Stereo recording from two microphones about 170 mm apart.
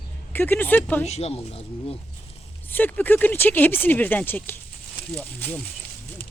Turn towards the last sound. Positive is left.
turn(degrees=10)  # may be behind; listen again after turning